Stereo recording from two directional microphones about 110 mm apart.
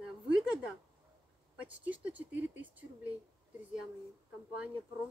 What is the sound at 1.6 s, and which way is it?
A woman's voice, 15° right (ahead or behind).